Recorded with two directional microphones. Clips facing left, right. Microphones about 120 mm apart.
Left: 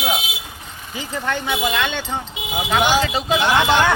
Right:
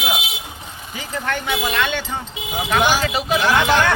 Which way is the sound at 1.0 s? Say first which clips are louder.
Left 1 dB; 15° left (ahead or behind).